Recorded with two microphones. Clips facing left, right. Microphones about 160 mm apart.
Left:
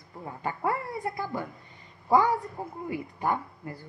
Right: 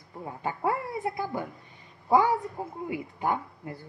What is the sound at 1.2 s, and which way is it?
Speech, 15° right (ahead or behind).